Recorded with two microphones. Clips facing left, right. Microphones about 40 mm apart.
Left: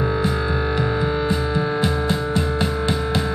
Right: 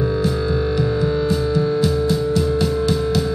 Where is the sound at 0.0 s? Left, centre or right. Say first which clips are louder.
Right 1 dB; left.